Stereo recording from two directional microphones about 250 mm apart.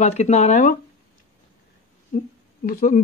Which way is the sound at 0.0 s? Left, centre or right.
Left.